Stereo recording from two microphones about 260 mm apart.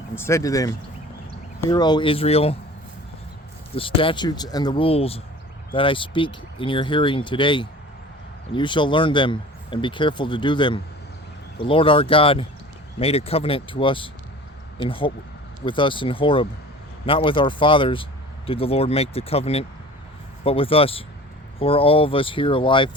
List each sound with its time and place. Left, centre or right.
0.2 s speech: centre
3.8 s speech: centre